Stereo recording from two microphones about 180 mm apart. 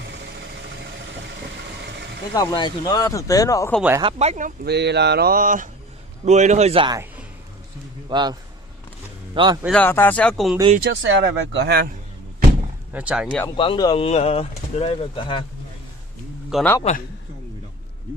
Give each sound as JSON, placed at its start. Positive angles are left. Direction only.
{"t": 2.3, "sound": "speech", "side_deg": 20}
{"t": 4.0, "sound": "a man's voice", "side_deg": -35}
{"t": 4.6, "sound": "a man's voice", "side_deg": -70}
{"t": 8.1, "sound": "a man's voice", "side_deg": -25}
{"t": 9.7, "sound": "speech", "side_deg": 10}
{"t": 10.8, "sound": "speech", "side_deg": -80}
{"t": 12.9, "sound": "speech", "side_deg": -5}
{"t": 13.6, "sound": "speech", "side_deg": 25}
{"t": 16.5, "sound": "speech", "side_deg": 0}